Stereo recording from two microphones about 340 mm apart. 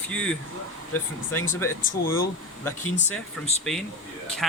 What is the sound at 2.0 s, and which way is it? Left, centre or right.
Speech, left.